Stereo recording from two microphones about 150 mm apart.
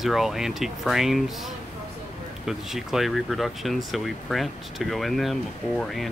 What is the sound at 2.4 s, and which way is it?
Speech, centre (ahead or behind).